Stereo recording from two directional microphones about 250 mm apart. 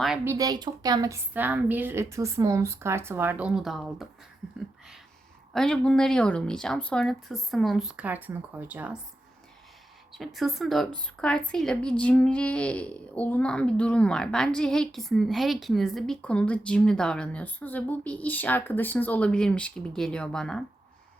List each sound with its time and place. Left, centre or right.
0.0 s a woman's voice: centre
0.3 s a woman's voice: centre
5.5 s a woman's voice: centre
10.1 s a woman's voice: centre